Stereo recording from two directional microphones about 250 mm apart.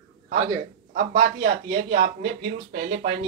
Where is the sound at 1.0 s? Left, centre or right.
Right.